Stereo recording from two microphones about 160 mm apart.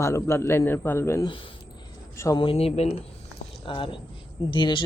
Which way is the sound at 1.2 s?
30° left (ahead or behind).